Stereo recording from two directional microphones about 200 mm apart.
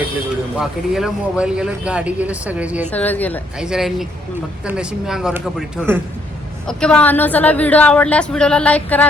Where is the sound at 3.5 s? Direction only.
5° right (ahead or behind).